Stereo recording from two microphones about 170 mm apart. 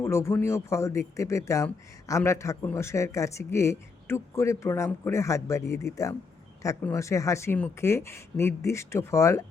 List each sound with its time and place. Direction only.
0.0 s speech: 15° left (ahead or behind)